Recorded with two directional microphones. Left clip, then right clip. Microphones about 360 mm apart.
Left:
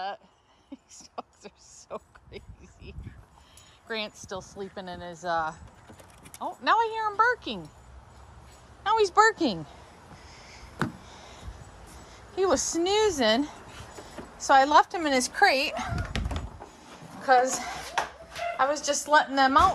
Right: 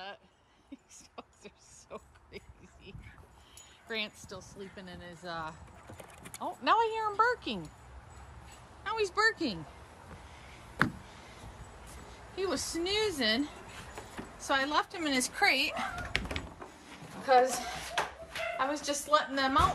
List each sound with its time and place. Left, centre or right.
1.1 s a sound: centre
3.8 s a woman's voice: centre
4.6 s speech: left
5.1 s a woman's voice: centre
8.8 s a woman's voice: centre
10.8 s a sound: centre
12.4 s a woman's voice: centre
17.2 s a sound: centre
18.6 s a woman's voice: centre